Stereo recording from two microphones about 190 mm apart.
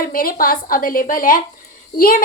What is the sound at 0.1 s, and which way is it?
A woman's voice, 50° left (ahead or behind).